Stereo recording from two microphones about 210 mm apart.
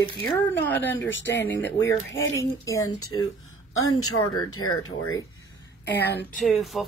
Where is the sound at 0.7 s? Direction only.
10° left (ahead or behind).